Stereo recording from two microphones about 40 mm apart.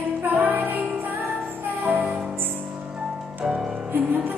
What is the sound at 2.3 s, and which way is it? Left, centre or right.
Music, right.